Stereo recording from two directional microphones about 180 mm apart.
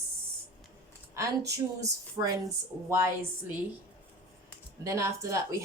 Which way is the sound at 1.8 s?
20° right (ahead or behind).